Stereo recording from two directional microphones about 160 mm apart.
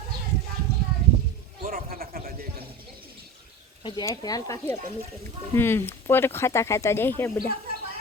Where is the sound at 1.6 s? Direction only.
65° right (ahead or behind).